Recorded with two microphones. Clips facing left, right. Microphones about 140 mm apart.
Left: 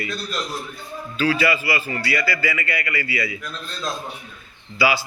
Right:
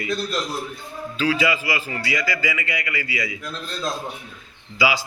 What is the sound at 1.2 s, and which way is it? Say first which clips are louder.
A man's voice: left 1 dB; 15° right (ahead or behind).